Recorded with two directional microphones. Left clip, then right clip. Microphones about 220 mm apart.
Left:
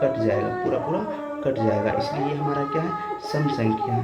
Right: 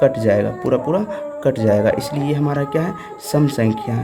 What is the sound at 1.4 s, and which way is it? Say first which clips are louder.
Speech: right 7 dB; 50° right (ahead or behind).